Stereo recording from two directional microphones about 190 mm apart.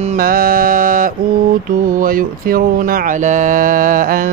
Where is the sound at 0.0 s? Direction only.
45° right (ahead or behind).